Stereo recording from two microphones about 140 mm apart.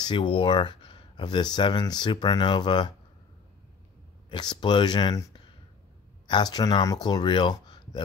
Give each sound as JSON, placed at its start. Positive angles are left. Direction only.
{"t": 0.0, "sound": "speech", "side_deg": 35}
{"t": 4.3, "sound": "speech", "side_deg": 35}